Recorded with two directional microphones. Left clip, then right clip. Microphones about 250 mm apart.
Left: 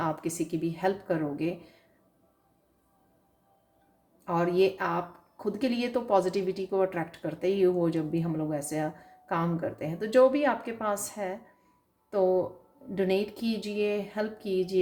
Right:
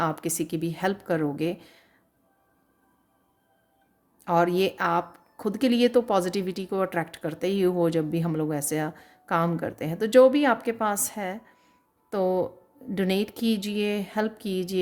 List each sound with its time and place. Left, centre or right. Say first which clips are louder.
0.0 s speech: right 3 dB; right
4.2 s speech: right 3 dB; right